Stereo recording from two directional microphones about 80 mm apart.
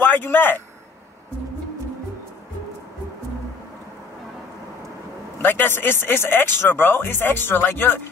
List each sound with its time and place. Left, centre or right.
0.0 s a man's voice: left
5.4 s speech: left